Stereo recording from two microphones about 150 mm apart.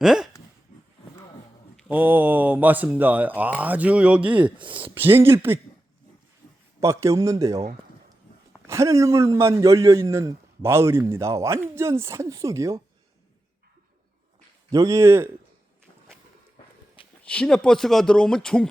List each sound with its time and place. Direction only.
0.0 s a sound: 5° right (ahead or behind)
1.9 s speech: 10° right (ahead or behind)
6.7 s a man's voice: 20° right (ahead or behind)
8.6 s a man's voice: 20° right (ahead or behind)
14.7 s a man's voice: 25° right (ahead or behind)
17.2 s speech: 5° left (ahead or behind)